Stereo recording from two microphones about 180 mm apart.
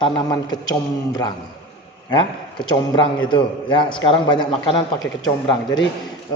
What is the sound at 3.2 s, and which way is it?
A man's voice, 25° left (ahead or behind).